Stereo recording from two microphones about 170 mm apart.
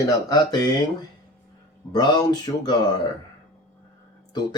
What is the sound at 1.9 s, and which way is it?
Speech, 25° left (ahead or behind).